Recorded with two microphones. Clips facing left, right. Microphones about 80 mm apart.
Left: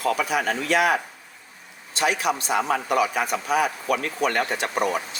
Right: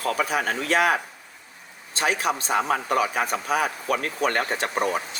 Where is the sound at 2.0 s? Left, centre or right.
Right.